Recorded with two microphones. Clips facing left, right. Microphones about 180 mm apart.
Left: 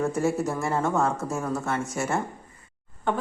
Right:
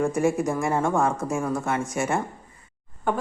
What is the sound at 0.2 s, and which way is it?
A woman's voice, 15° right (ahead or behind).